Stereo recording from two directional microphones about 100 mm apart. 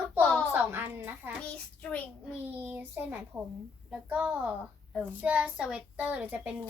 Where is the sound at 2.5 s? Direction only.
20° right (ahead or behind).